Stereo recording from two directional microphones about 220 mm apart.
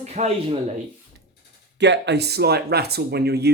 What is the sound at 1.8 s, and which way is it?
Speech, 55° right (ahead or behind).